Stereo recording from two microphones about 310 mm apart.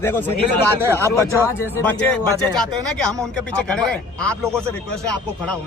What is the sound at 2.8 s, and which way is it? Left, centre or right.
Speech, centre.